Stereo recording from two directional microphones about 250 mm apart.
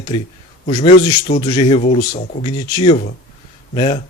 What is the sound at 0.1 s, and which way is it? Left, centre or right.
Speech, left.